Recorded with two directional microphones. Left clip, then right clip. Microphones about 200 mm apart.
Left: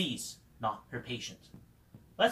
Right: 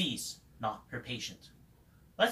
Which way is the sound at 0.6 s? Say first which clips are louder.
Left 2 dB; 15° right (ahead or behind).